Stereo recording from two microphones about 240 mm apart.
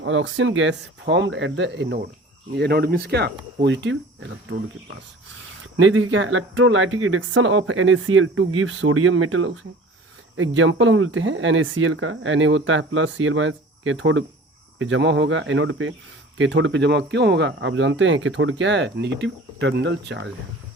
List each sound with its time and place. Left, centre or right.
0.0 s speech: right
5.7 s speech: right